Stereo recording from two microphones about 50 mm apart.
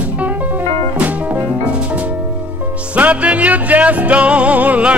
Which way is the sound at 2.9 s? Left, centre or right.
Right.